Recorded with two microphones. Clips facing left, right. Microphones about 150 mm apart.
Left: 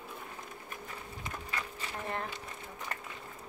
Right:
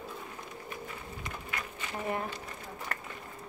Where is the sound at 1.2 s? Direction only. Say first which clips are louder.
Left 1 dB; 30° left (ahead or behind).